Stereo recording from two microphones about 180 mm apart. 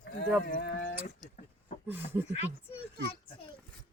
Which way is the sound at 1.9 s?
10° right (ahead or behind).